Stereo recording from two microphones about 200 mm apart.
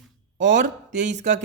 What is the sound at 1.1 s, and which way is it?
Speech, 35° right (ahead or behind).